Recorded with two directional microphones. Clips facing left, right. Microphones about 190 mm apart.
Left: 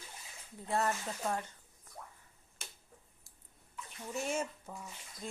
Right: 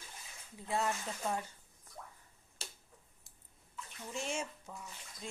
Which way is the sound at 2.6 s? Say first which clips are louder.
Right 2 dB; 30° right (ahead or behind).